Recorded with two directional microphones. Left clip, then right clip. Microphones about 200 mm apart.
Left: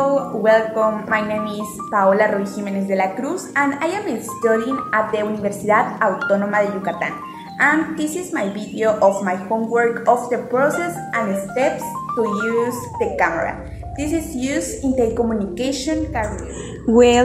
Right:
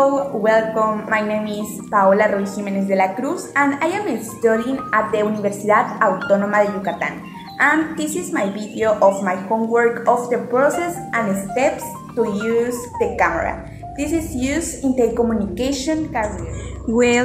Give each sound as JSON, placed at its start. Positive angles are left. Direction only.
{"t": 0.4, "sound": "a woman's voice", "side_deg": 0}
{"t": 16.9, "sound": "speech", "side_deg": 15}